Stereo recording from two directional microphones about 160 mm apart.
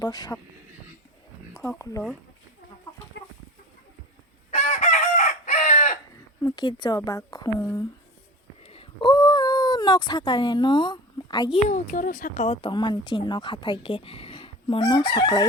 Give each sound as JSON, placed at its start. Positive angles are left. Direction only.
{"t": 0.0, "sound": "speech", "side_deg": 25}
{"t": 1.5, "sound": "speech", "side_deg": 15}
{"t": 4.5, "sound": "chicken", "side_deg": 45}
{"t": 6.4, "sound": "speech", "side_deg": 25}
{"t": 8.6, "sound": "a sound", "side_deg": 35}
{"t": 11.7, "sound": "speech", "side_deg": 60}
{"t": 12.6, "sound": "speech", "side_deg": 30}